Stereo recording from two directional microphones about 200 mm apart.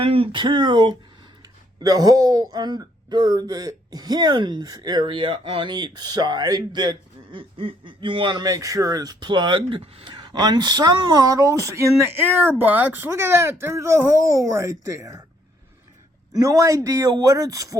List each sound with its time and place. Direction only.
0.0 s speech: 25° right (ahead or behind)
16.3 s a man's voice: 15° right (ahead or behind)